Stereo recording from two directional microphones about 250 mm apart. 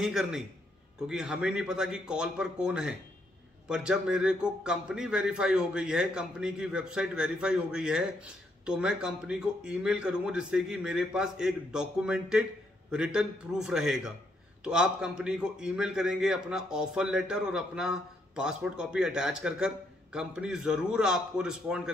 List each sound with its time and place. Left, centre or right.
0.0 s a man's voice: centre